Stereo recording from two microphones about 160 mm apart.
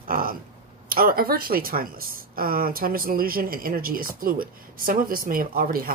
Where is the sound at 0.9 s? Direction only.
65° right (ahead or behind).